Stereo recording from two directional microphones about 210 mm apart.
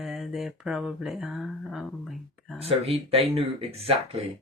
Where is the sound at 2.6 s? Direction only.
30° right (ahead or behind).